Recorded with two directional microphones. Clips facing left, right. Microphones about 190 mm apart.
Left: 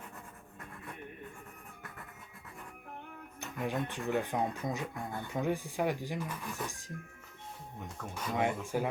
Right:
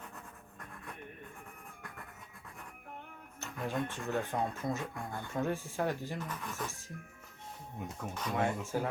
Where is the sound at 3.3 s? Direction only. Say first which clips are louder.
Left 1 dB; 15° left (ahead or behind).